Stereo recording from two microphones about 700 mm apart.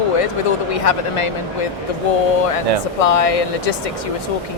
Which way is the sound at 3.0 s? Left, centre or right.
Left.